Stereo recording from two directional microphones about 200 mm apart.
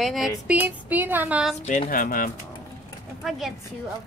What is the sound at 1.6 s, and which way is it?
Speech, 35° left (ahead or behind).